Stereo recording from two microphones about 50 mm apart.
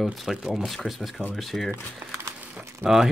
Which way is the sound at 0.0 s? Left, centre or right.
Centre.